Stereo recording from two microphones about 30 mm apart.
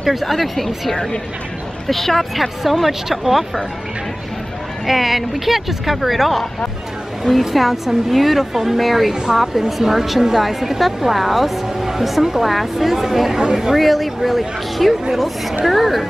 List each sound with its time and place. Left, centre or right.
0.0 s speech: centre
4.8 s speech: centre
9.1 s a woman's voice: right
9.4 s speech: centre
13.7 s speech: centre